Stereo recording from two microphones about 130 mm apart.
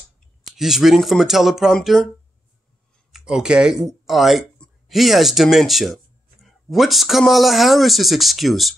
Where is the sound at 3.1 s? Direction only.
5° right (ahead or behind).